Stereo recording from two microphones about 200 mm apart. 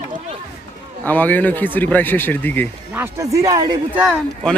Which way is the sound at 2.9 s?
15° right (ahead or behind).